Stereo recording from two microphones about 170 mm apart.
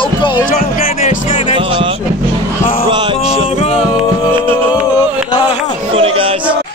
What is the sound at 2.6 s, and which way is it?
Music, 55° left (ahead or behind).